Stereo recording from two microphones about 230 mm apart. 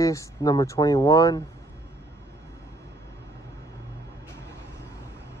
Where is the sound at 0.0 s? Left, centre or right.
Centre.